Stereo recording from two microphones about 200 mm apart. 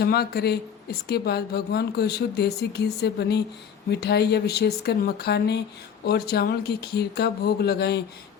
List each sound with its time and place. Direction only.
0.0 s speech: 50° left (ahead or behind)